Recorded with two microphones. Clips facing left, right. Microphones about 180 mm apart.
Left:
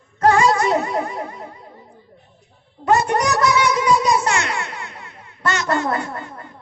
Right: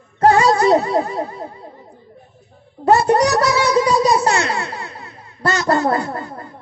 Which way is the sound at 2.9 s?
35° right (ahead or behind).